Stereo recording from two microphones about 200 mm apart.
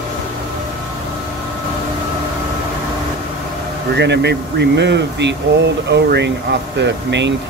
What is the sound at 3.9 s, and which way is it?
Speech, 55° right (ahead or behind).